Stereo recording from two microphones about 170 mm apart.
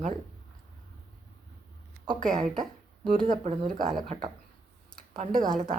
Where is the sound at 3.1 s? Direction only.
45° right (ahead or behind).